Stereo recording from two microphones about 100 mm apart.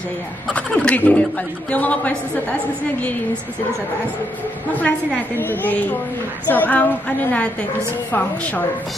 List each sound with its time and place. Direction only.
0.5 s a woman's voice: 10° left (ahead or behind)
4.7 s a woman's voice: 15° left (ahead or behind)